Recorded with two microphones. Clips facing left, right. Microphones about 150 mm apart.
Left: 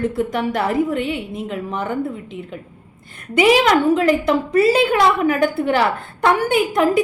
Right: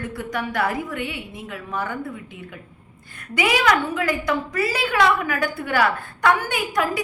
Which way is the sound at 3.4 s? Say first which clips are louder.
Left 6 dB; 30° left (ahead or behind).